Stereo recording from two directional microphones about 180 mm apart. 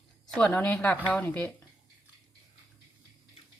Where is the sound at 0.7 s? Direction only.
5° left (ahead or behind).